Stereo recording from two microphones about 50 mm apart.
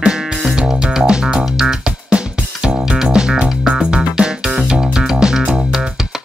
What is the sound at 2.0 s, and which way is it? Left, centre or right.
Music, right.